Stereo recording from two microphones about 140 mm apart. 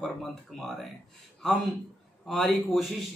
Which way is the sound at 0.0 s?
Centre (ahead or behind).